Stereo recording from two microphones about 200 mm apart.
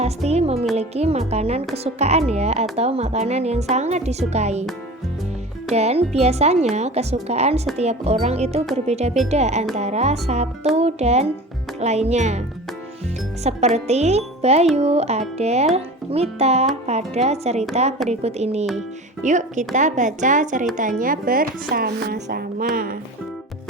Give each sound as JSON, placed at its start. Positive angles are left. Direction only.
{"t": 0.3, "sound": "speech", "side_deg": -30}
{"t": 5.7, "sound": "speech", "side_deg": -30}
{"t": 13.4, "sound": "speech", "side_deg": -35}